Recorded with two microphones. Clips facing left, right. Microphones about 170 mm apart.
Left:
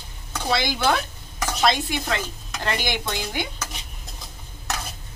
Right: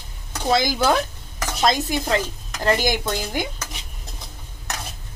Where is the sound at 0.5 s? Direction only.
40° right (ahead or behind).